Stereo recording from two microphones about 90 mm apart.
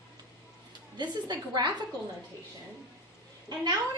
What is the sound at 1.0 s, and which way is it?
Speech, 55° right (ahead or behind).